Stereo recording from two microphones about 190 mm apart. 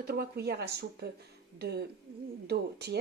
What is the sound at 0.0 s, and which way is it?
A woman's voice, 55° right (ahead or behind).